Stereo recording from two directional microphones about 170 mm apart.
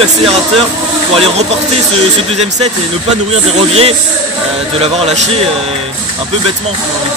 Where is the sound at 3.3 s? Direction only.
35° right (ahead or behind).